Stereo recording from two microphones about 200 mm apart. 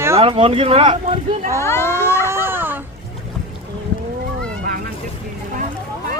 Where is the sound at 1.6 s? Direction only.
15° left (ahead or behind).